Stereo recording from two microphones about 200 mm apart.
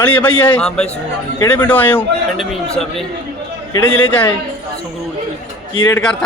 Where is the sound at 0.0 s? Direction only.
5° left (ahead or behind).